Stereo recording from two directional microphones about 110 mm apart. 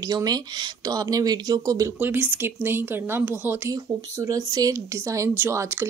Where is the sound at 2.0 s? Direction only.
15° right (ahead or behind).